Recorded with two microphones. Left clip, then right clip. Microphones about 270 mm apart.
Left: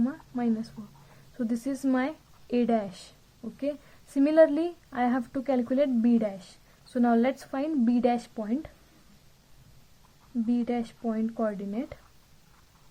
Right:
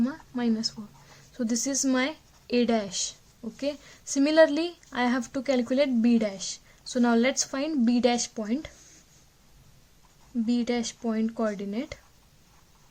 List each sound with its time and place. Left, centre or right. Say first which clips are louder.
0.0 s a sound: right 1 dB; right
1.4 s a woman's voice: right 3 dB; right
10.4 s a woman's voice: right 2 dB; right